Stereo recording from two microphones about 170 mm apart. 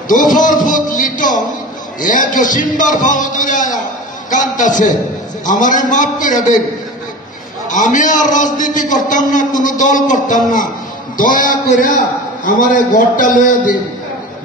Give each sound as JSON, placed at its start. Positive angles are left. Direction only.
{"t": 0.1, "sound": "a man's voice", "side_deg": 50}
{"t": 7.7, "sound": "a man's voice", "side_deg": 50}